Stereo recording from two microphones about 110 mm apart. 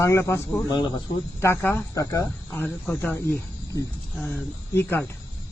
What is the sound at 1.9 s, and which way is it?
Speech, 30° left (ahead or behind).